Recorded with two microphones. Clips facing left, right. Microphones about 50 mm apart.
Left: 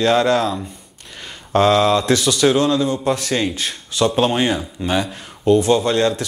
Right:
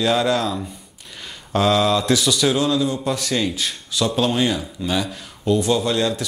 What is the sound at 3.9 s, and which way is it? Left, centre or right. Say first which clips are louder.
Speech: left 3 dB; left.